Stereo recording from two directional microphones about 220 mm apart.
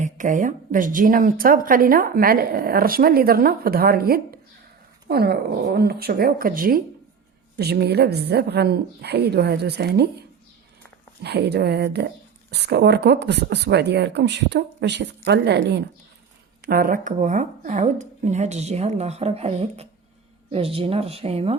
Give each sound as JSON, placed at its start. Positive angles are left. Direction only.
{"t": 0.0, "sound": "speech", "side_deg": -35}
{"t": 11.2, "sound": "speech", "side_deg": -50}